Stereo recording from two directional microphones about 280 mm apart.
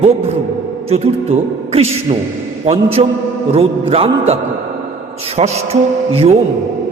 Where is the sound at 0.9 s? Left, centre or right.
Right.